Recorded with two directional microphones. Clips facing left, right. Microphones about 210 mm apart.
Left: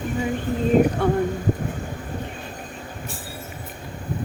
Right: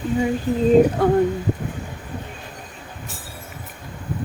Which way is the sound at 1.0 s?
40° right (ahead or behind).